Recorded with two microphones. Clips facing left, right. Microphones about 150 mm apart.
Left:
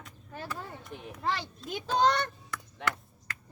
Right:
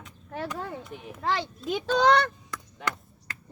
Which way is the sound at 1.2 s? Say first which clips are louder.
Right 4 dB; 90° right.